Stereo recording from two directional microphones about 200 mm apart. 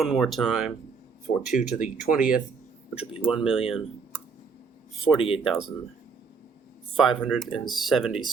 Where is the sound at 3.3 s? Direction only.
5° right (ahead or behind).